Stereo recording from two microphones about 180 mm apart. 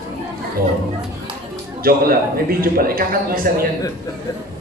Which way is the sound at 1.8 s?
55° right (ahead or behind).